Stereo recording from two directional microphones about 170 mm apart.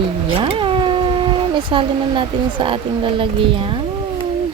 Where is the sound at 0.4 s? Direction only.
30° right (ahead or behind).